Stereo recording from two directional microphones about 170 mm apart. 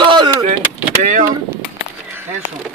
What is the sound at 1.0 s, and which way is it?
Speech, 45° right (ahead or behind).